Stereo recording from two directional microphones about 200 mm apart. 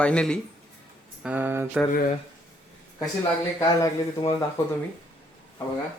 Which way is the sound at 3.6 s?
15° left (ahead or behind).